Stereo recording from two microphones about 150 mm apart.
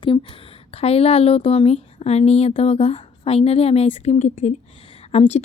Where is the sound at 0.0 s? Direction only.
35° left (ahead or behind).